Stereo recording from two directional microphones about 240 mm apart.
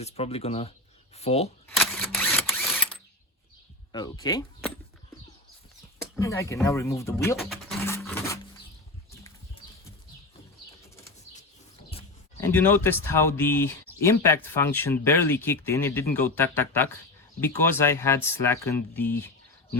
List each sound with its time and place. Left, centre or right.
0.0 s speech: left
1.6 s camera: centre
3.9 s speech: centre
6.0 s speech: centre
7.3 s speech: centre
7.9 s a sound: centre
12.4 s speech: centre